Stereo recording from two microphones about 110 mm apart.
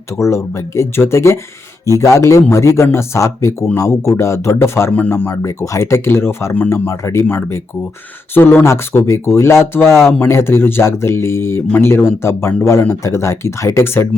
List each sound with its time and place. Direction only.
0.2 s speech: 25° left (ahead or behind)